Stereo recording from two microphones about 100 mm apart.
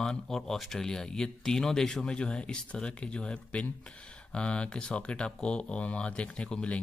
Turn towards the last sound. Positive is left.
turn(degrees=10)  # may be behind; listen again after turning